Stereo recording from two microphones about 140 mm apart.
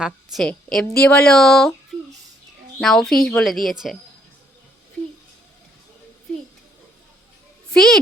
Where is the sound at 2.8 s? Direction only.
5° left (ahead or behind).